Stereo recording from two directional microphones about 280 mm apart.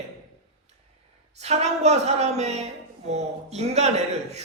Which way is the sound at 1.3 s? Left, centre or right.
Right.